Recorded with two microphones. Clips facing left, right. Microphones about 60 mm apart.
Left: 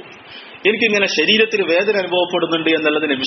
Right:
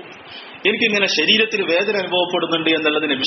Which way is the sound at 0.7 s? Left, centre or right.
Left.